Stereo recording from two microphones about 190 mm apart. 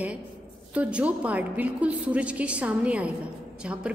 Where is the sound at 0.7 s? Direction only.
5° right (ahead or behind).